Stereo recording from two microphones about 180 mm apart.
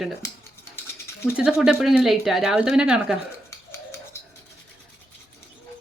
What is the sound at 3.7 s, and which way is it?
Bird, 15° left (ahead or behind).